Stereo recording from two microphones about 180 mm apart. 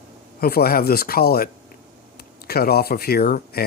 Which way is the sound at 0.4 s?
55° left (ahead or behind).